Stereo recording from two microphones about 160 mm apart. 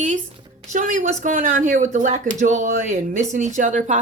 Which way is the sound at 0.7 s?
55° right (ahead or behind).